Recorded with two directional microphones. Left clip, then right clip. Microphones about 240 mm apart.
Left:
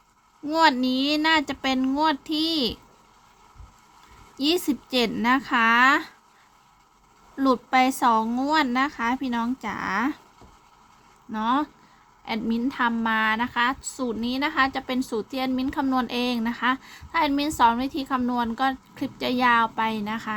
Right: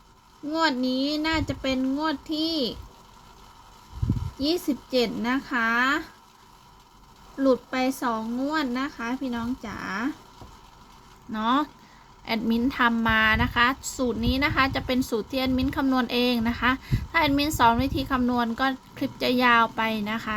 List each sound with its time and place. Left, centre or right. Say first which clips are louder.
0.5 s speech: left 4 dB; left
4.4 s speech: left 3 dB; left
7.3 s speech: left 3 dB; left
11.3 s a woman's voice: even; centre